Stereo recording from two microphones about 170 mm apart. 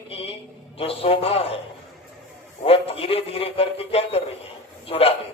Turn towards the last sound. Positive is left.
turn(degrees=35)  # may be behind; listen again after turning